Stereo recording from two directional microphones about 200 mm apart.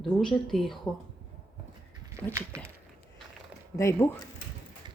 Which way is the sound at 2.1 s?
15° right (ahead or behind).